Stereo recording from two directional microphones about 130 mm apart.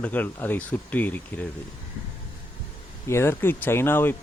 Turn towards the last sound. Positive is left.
turn(degrees=15)  # may be behind; listen again after turning